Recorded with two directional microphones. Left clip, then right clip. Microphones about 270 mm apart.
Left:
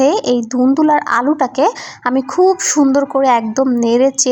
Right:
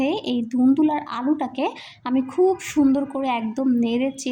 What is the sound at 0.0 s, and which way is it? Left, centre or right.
A woman's voice, left.